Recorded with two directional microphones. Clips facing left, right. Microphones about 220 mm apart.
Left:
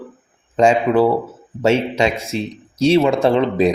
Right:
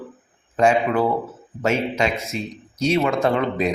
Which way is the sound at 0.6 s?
30° left (ahead or behind).